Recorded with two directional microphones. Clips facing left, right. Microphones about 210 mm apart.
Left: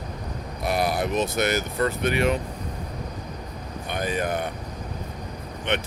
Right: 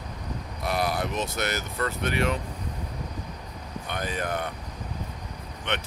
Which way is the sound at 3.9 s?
15° left (ahead or behind).